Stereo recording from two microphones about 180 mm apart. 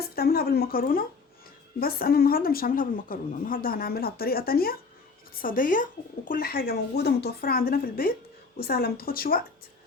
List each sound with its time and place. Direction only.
0.2 s a woman's voice: 60° left (ahead or behind)